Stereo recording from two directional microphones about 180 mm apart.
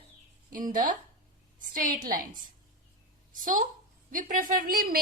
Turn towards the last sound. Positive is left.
turn(degrees=-55)  # may be behind; listen again after turning